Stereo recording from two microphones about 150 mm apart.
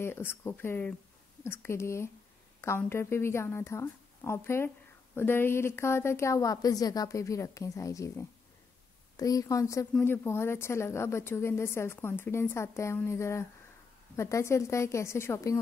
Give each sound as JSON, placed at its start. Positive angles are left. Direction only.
{"t": 0.0, "sound": "speech", "side_deg": 15}